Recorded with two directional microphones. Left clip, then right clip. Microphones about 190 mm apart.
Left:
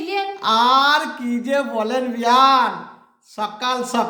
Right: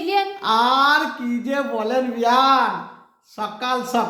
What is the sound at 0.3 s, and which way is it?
A man's voice, 30° left (ahead or behind).